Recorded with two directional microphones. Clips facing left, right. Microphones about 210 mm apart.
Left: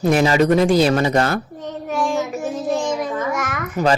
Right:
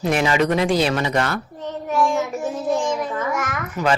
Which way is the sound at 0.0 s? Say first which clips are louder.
Left 4 dB; 40° left (ahead or behind).